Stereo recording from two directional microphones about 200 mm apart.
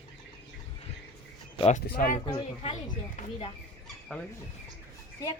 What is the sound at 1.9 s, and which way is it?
Speech, 45° left (ahead or behind).